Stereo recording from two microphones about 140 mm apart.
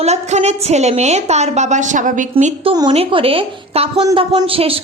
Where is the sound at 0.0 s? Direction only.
50° right (ahead or behind).